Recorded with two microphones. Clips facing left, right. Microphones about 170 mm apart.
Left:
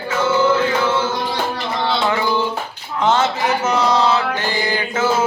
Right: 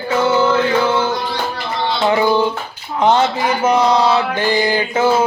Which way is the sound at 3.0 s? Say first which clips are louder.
Right 3 dB; 15° right (ahead or behind).